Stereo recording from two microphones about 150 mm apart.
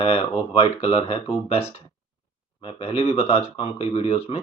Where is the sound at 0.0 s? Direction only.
40° left (ahead or behind).